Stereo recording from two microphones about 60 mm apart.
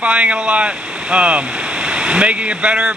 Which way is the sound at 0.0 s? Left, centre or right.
Right.